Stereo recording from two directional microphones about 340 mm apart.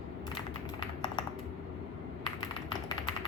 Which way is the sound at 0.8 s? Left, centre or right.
Centre.